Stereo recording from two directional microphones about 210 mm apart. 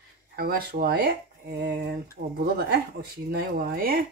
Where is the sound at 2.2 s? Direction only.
55° right (ahead or behind).